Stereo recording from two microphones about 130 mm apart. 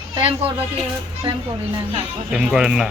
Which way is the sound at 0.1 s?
40° right (ahead or behind).